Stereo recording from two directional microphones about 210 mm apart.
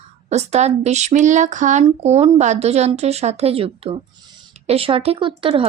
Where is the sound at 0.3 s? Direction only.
30° right (ahead or behind).